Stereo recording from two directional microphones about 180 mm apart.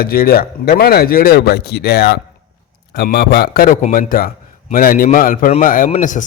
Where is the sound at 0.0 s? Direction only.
55° left (ahead or behind).